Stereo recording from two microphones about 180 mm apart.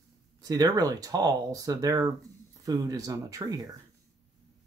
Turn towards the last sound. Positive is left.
turn(degrees=-20)  # may be behind; listen again after turning